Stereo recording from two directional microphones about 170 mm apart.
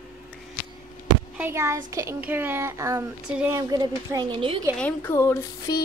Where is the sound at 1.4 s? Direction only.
15° right (ahead or behind).